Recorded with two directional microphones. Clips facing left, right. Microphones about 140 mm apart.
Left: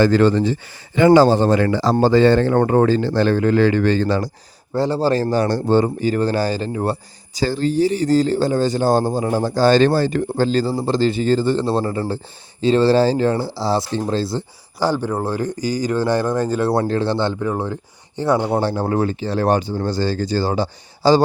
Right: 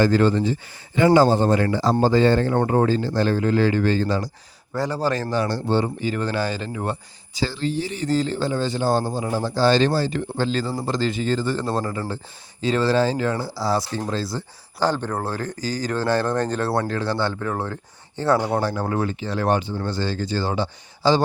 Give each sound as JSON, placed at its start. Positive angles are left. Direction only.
{"t": 0.0, "sound": "speech", "side_deg": 80}
{"t": 4.7, "sound": "speech", "side_deg": 30}
{"t": 14.8, "sound": "speech", "side_deg": 10}
{"t": 16.7, "sound": "speech", "side_deg": 30}